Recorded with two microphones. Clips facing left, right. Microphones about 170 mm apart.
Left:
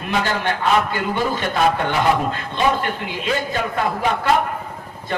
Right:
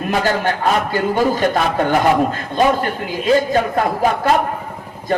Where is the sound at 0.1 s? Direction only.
40° right (ahead or behind).